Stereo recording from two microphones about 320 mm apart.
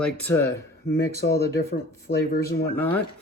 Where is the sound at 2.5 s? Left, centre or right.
Centre.